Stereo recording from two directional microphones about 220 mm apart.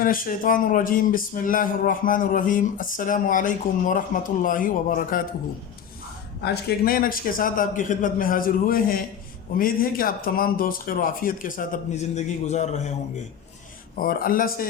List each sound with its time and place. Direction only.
0.0 s speech: 40° left (ahead or behind)
6.4 s speech: 45° left (ahead or behind)
13.9 s speech: 40° left (ahead or behind)